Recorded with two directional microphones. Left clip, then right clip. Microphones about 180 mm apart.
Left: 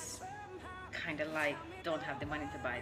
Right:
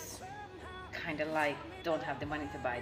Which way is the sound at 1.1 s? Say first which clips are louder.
Right 3 dB; 20° left (ahead or behind).